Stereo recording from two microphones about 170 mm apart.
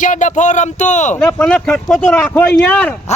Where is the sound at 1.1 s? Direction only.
5° left (ahead or behind).